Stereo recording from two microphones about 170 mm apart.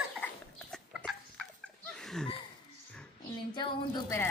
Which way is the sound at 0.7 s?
5° left (ahead or behind).